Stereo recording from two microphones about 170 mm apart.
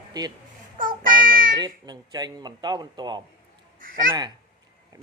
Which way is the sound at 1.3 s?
55° right (ahead or behind).